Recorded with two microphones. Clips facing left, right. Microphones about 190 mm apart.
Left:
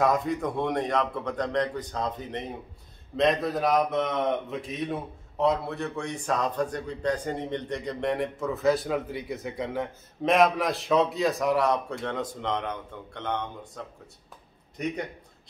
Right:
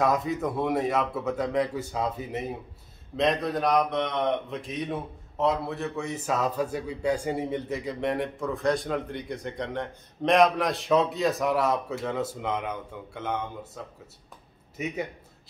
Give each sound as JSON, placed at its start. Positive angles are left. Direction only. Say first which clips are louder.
{"t": 0.0, "sound": "speech", "louder": "even", "side_deg": 0}